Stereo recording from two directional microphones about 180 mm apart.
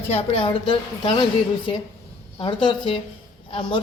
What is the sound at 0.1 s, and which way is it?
A woman's voice, 35° left (ahead or behind).